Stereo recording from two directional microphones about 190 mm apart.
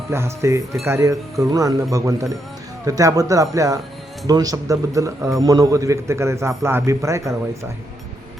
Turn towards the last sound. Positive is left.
turn(degrees=-15)  # may be behind; listen again after turning